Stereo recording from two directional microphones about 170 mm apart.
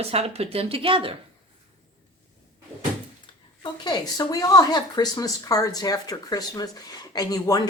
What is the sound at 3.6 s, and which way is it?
A woman's voice, 25° left (ahead or behind).